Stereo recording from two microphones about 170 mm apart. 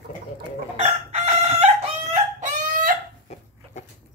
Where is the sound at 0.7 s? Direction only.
40° right (ahead or behind).